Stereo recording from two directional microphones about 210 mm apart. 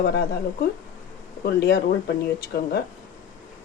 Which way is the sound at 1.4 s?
50° left (ahead or behind).